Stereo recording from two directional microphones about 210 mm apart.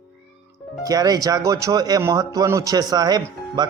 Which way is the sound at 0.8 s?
15° right (ahead or behind).